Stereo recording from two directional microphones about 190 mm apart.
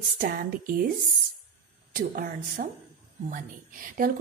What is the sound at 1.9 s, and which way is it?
A woman's voice, 45° right (ahead or behind).